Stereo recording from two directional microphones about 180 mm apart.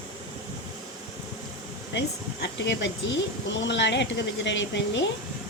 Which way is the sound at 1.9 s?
75° left (ahead or behind).